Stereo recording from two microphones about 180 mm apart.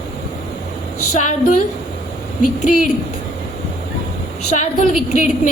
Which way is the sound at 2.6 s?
45° left (ahead or behind).